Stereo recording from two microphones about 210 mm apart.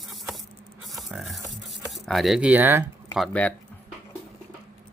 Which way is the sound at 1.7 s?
Centre (ahead or behind).